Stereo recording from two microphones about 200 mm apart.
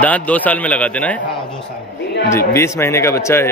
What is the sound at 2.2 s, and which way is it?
Speech, 15° left (ahead or behind).